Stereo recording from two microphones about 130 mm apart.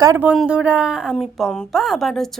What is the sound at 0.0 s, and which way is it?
Speech, 20° right (ahead or behind).